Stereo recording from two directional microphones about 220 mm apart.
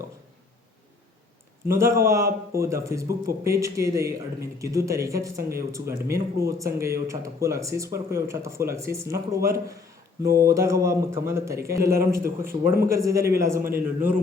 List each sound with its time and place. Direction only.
1.6 s speech: 10° right (ahead or behind)
10.2 s speech: 45° right (ahead or behind)
10.5 s speech: 15° right (ahead or behind)